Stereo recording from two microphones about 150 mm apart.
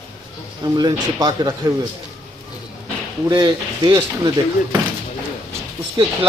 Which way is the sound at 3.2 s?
30° right (ahead or behind).